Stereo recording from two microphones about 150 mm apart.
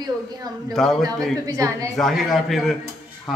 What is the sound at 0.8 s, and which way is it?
Speech, centre (ahead or behind).